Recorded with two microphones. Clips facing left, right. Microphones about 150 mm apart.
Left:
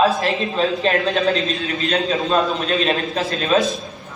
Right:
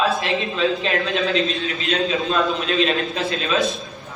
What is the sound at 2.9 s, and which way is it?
Speech, 40° left (ahead or behind).